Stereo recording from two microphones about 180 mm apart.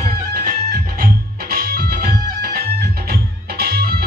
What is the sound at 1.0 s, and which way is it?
Music, 55° right (ahead or behind).